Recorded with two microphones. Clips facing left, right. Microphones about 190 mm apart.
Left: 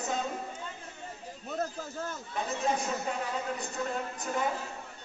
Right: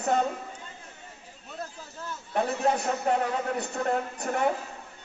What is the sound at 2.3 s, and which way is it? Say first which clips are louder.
A man's voice: right 6 dB; 65° right (ahead or behind).